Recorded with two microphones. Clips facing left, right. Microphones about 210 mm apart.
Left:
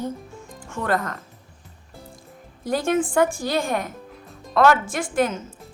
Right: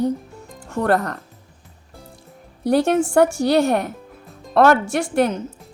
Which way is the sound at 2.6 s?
70° right (ahead or behind).